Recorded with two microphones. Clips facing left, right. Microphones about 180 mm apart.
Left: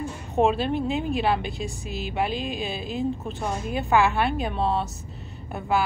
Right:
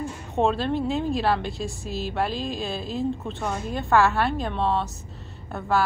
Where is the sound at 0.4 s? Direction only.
5° left (ahead or behind).